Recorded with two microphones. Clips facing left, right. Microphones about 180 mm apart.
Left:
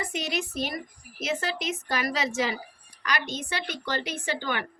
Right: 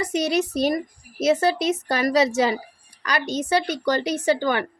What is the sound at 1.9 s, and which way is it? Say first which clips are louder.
A woman's voice: right 9 dB; 40° right (ahead or behind).